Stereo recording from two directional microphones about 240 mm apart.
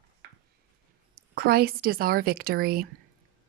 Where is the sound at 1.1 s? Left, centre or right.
Right.